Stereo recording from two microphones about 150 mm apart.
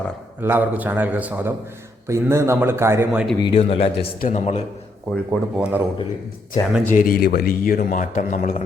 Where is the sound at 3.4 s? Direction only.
35° left (ahead or behind).